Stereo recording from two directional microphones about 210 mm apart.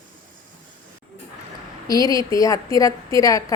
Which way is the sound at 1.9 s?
15° left (ahead or behind).